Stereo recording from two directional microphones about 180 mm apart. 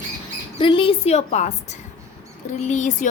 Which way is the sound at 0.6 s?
30° left (ahead or behind).